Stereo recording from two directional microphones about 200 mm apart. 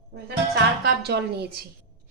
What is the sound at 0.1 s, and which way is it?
A woman's voice, 55° right (ahead or behind).